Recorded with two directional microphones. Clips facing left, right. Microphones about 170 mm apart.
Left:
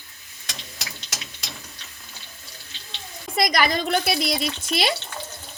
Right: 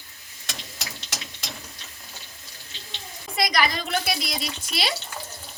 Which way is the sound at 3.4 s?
50° left (ahead or behind).